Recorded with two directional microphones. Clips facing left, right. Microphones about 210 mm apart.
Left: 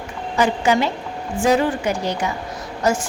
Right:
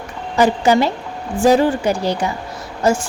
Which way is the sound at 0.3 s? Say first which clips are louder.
Right 4 dB; 35° right (ahead or behind).